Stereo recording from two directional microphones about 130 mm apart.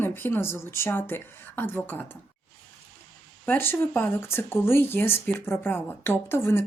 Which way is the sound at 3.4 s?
15° left (ahead or behind).